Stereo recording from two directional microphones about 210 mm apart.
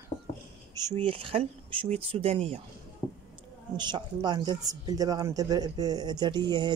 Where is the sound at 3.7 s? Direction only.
20° right (ahead or behind).